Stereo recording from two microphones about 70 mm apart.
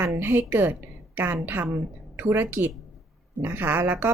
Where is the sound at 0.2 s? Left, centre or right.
Right.